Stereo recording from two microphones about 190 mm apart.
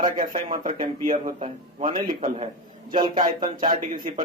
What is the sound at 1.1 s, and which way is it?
A man's voice, 30° right (ahead or behind).